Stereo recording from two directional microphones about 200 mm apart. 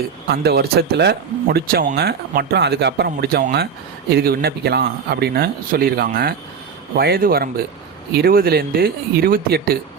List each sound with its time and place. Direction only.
0.3 s speech: 50° right (ahead or behind)